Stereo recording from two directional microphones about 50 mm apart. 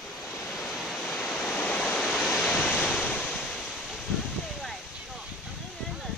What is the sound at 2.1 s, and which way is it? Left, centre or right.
Waves, centre.